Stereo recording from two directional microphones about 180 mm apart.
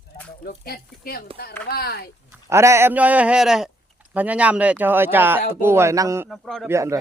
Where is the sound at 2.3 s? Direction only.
15° right (ahead or behind).